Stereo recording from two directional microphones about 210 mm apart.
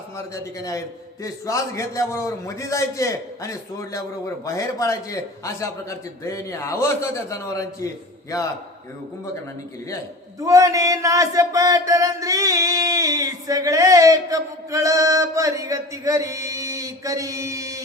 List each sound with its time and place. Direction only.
0.3 s a man's voice: 15° left (ahead or behind)
10.4 s speech: 15° right (ahead or behind)